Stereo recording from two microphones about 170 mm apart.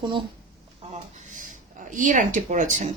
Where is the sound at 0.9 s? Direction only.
45° right (ahead or behind).